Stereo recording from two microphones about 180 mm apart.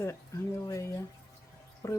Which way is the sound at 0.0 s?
15° left (ahead or behind).